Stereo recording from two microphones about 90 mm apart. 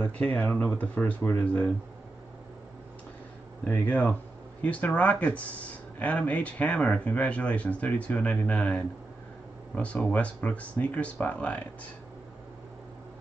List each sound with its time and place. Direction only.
0.0 s speech: 20° left (ahead or behind)
3.6 s speech: 20° left (ahead or behind)
10.1 s speech: 15° left (ahead or behind)